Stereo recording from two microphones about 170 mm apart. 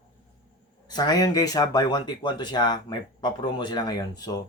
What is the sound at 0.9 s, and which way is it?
Speech, 25° left (ahead or behind).